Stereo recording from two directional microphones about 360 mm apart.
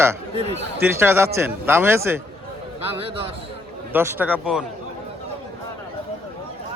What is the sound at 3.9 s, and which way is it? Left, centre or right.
Speech, centre.